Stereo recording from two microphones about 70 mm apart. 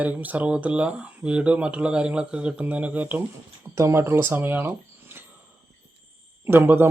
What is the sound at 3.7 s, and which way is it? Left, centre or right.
Speech, right.